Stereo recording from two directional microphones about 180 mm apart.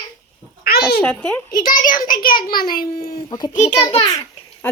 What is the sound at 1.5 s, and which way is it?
A child's voice, 55° left (ahead or behind).